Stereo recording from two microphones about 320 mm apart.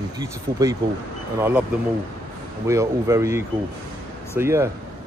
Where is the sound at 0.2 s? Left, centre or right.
Centre.